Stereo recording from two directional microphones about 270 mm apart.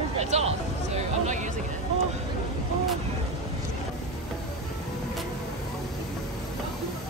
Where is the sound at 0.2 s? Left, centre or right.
Right.